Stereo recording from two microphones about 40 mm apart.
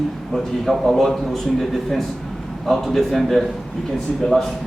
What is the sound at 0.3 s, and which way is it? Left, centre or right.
A man's voice, centre.